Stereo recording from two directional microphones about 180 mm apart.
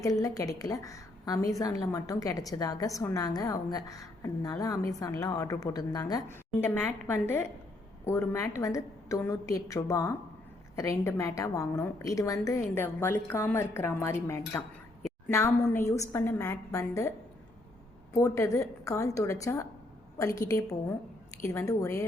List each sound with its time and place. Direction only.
0.0 s a woman's voice: 20° left (ahead or behind)
18.1 s a woman's voice: 15° left (ahead or behind)